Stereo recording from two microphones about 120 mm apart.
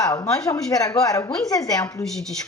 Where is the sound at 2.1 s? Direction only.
5° left (ahead or behind).